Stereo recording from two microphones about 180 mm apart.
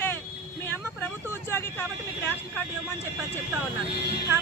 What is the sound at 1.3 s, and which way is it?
Vehicle, 15° left (ahead or behind).